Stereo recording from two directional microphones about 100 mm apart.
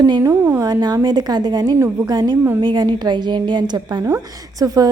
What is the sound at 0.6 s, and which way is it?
A woman's voice, 40° right (ahead or behind).